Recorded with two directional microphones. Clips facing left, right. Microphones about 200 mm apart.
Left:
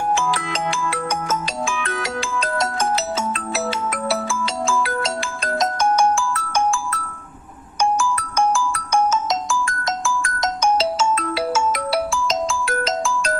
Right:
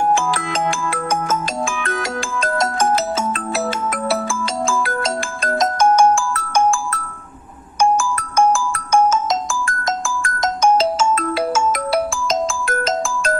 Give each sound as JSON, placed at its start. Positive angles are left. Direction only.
{"t": 0.1, "sound": "music", "side_deg": -50}
{"t": 7.8, "sound": "ringtone", "side_deg": -50}